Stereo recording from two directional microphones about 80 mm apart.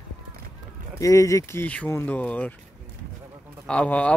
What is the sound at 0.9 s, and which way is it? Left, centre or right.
Speech, left.